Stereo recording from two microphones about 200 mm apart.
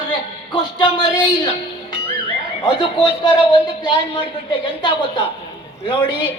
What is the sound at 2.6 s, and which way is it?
Speech, 20° left (ahead or behind).